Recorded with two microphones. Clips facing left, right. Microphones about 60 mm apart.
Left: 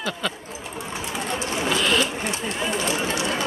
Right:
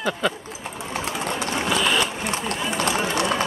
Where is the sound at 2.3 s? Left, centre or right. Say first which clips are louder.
Even; right.